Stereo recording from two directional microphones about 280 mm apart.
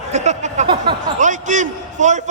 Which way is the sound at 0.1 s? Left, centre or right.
Right.